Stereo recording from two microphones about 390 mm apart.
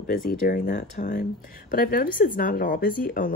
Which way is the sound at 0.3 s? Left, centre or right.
Left.